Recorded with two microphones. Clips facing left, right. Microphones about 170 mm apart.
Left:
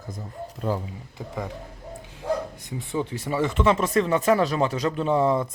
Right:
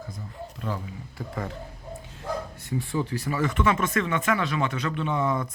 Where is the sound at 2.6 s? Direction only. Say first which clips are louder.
Right 2 dB; 20° left (ahead or behind).